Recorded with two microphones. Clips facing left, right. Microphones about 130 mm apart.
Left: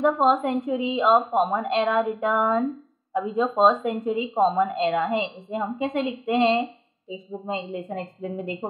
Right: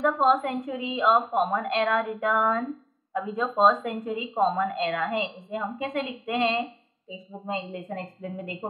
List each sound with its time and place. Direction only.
0.0 s speech: 25° left (ahead or behind)